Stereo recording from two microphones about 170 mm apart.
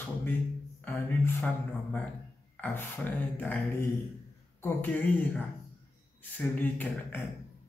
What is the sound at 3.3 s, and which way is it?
A man's voice, 10° left (ahead or behind).